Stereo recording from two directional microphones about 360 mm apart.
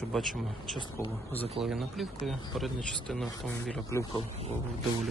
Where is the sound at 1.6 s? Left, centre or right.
Centre.